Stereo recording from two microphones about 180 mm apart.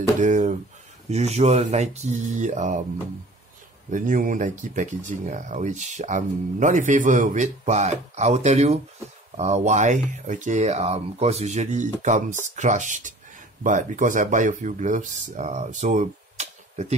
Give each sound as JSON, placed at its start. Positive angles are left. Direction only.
{"t": 0.2, "sound": "speech", "side_deg": -40}
{"t": 3.9, "sound": "speech", "side_deg": -45}